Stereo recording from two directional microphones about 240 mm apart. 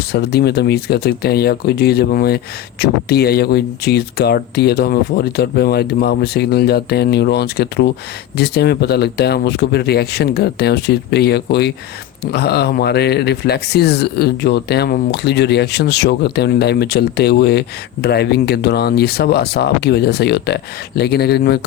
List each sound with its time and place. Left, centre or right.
0.1 s speech: left